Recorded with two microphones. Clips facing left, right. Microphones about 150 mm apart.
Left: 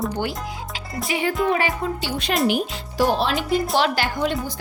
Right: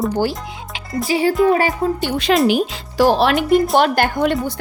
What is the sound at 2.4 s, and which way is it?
Speech, 90° right.